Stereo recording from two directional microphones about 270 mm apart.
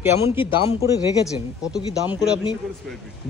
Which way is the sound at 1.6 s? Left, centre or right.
Centre.